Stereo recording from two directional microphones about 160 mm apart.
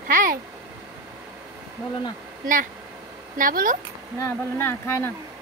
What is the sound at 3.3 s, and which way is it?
Speech, 60° right (ahead or behind).